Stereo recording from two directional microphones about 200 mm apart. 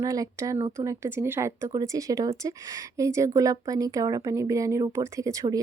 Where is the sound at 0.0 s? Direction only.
15° right (ahead or behind).